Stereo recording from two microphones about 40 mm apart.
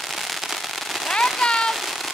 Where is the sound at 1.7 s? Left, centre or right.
Centre.